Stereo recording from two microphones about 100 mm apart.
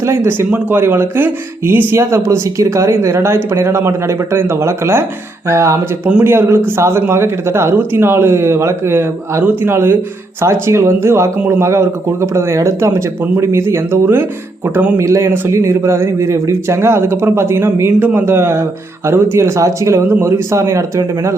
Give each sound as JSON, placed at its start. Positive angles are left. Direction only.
{"t": 0.0, "sound": "a man's voice", "side_deg": -25}